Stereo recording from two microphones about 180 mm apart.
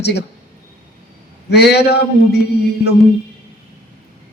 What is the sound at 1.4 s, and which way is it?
Speech, 65° left (ahead or behind).